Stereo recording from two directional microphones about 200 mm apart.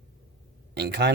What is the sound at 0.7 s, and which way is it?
Speech, 55° right (ahead or behind).